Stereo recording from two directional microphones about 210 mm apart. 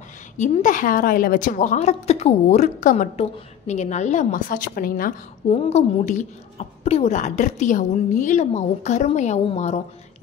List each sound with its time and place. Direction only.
0.4 s a woman's voice: 35° left (ahead or behind)
5.6 s a woman's voice: 30° left (ahead or behind)